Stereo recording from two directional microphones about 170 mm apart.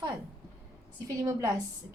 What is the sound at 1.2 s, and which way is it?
Speech, 20° right (ahead or behind).